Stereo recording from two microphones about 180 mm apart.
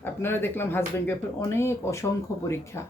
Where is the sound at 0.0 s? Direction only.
10° left (ahead or behind).